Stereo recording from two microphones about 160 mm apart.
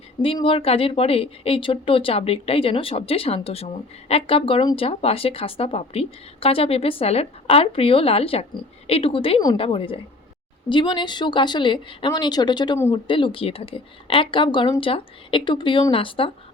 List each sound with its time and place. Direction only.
0.3 s speech: 35° left (ahead or behind)